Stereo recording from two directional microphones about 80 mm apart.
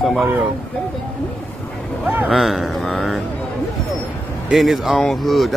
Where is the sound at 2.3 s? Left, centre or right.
Centre.